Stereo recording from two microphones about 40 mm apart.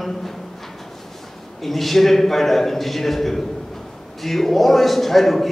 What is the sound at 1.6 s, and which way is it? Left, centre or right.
A man's voice, centre.